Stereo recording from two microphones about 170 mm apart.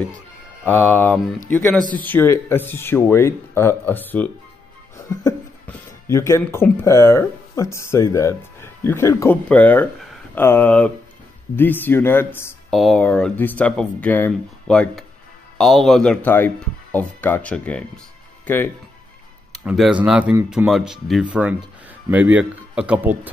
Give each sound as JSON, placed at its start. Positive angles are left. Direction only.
{"t": 0.7, "sound": "speech", "side_deg": 15}
{"t": 12.7, "sound": "speech", "side_deg": 5}